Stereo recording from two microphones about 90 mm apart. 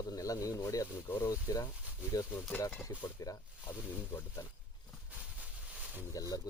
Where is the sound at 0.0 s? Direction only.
40° left (ahead or behind).